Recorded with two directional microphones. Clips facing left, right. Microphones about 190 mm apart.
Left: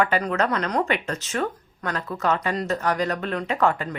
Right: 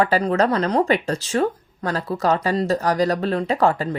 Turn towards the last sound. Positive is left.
turn(degrees=-30)  # may be behind; listen again after turning